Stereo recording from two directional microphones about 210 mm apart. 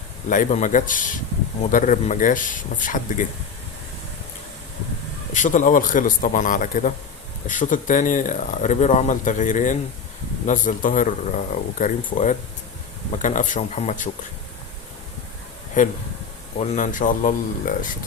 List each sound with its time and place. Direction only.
0.3 s speech: 35° left (ahead or behind)
5.3 s speech: 35° left (ahead or behind)
15.8 s speech: 40° left (ahead or behind)